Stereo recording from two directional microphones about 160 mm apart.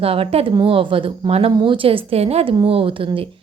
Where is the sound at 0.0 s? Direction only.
35° right (ahead or behind).